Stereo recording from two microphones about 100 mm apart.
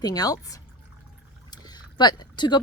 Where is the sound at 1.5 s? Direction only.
45° left (ahead or behind).